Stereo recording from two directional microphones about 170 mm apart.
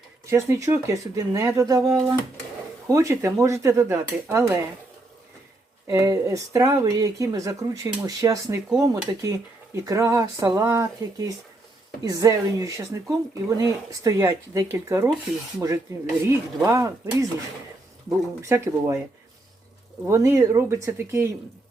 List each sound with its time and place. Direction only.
0.3 s speech: 15° right (ahead or behind)
5.9 s speech: 20° right (ahead or behind)
16.2 s speech: 20° right (ahead or behind)
18.4 s speech: 15° right (ahead or behind)
20.1 s speech: 20° right (ahead or behind)